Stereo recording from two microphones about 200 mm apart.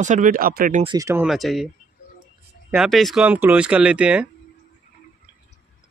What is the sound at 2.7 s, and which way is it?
Speech, centre (ahead or behind).